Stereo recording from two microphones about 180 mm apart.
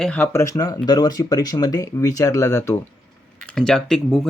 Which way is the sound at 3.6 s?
5° left (ahead or behind).